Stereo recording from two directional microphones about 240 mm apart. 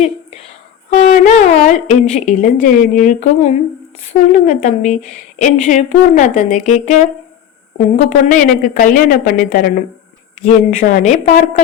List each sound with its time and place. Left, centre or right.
0.9 s a woman's voice: left